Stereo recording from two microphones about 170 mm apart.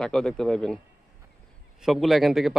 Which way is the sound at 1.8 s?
Centre (ahead or behind).